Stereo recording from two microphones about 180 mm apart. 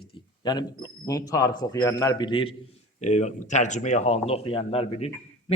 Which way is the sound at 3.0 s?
40° left (ahead or behind).